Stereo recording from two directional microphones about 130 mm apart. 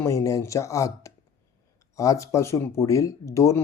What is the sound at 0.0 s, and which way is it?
Speech, 25° left (ahead or behind).